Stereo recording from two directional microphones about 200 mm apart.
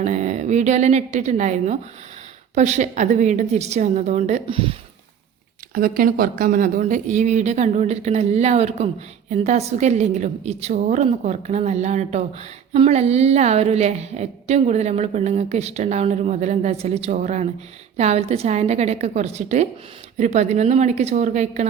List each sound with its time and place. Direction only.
0.0 s a woman's voice: 35° right (ahead or behind)
5.7 s a woman's voice: 45° right (ahead or behind)